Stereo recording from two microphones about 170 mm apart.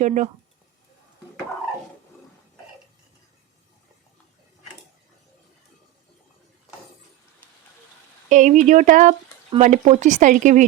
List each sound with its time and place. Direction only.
0.0 s speech: 45° right (ahead or behind)
8.3 s speech: 45° right (ahead or behind)